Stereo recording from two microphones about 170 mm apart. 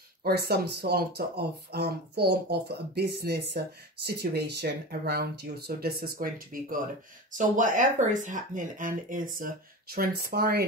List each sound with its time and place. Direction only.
0.2 s speech: 70° right (ahead or behind)